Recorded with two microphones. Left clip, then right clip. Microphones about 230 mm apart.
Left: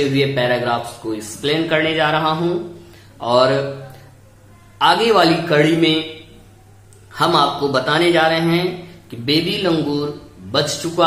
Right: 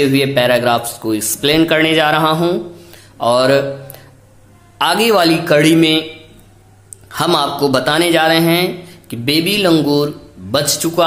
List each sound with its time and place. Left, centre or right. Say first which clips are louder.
0.1 s speech: right 5 dB; right
4.7 s speech: right 1 dB; right
7.1 s speech: even; right